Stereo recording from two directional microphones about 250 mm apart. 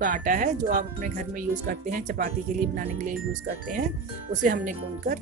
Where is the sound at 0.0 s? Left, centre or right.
Right.